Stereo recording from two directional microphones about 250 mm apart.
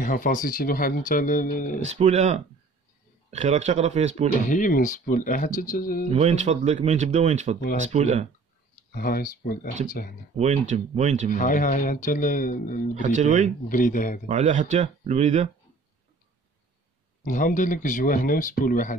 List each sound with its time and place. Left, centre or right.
0.0 s speech: left
1.8 s speech: right
4.5 s speech: left
6.1 s speech: right
8.9 s speech: left
10.3 s speech: right
11.3 s speech: left
12.9 s speech: right
13.7 s speech: left
14.2 s speech: right
17.2 s speech: left